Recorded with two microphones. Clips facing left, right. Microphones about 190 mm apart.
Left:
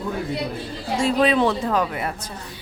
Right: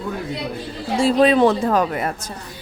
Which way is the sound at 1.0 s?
35° right (ahead or behind).